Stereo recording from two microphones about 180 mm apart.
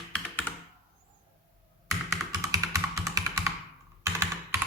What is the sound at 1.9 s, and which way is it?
Computer keyboard, 20° right (ahead or behind).